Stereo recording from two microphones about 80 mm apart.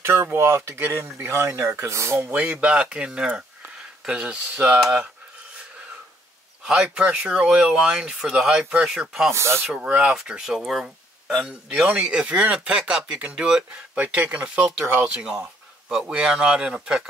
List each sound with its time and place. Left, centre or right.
0.0 s speech: right
2.3 s speech: centre
6.6 s speech: centre
9.3 s speech: right
9.8 s speech: right
10.0 s speech: centre